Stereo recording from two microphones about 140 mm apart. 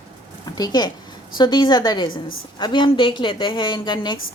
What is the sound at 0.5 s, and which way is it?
A woman's voice, 30° left (ahead or behind).